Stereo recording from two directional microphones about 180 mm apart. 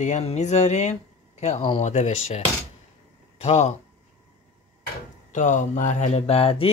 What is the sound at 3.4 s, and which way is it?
Speech, 40° left (ahead or behind).